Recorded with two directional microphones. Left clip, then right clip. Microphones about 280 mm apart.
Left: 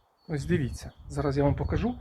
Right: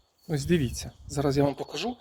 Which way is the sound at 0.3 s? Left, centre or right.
Right.